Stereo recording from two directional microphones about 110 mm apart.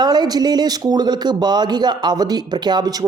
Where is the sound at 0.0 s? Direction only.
40° right (ahead or behind).